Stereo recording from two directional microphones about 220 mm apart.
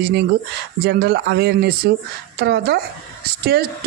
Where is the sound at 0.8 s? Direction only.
45° right (ahead or behind).